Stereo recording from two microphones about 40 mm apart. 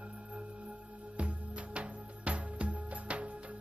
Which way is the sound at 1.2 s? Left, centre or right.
Right.